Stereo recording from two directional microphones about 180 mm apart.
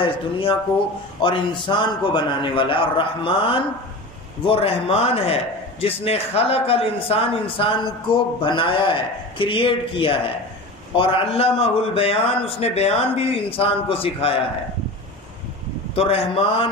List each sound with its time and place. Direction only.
0.0 s a man's voice: 30° left (ahead or behind)
16.0 s a man's voice: 30° left (ahead or behind)